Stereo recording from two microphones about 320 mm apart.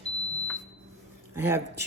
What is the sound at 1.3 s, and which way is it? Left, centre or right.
Speech, centre.